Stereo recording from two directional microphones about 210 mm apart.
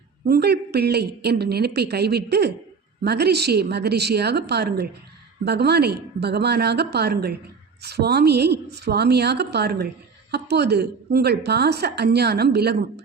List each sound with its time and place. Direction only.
0.3 s a woman's voice: 50° right (ahead or behind)